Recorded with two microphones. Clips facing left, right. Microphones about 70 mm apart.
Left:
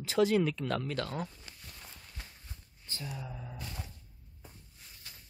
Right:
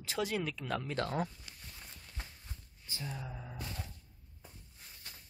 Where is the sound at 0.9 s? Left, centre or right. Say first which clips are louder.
Right 1 dB; right.